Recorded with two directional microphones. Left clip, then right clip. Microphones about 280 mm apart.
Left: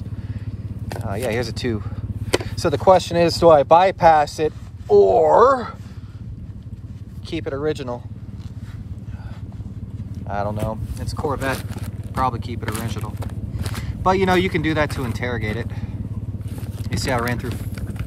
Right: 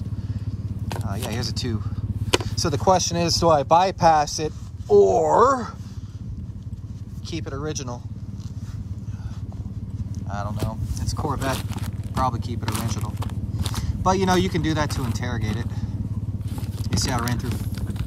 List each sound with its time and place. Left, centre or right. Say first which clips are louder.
0.8 s speech: left 7 dB; centre
7.2 s speech: left 7 dB; centre
10.1 s a sound: left 7 dB; centre
11.2 s speech: left 4 dB; centre
16.5 s vehicle: right 2 dB; centre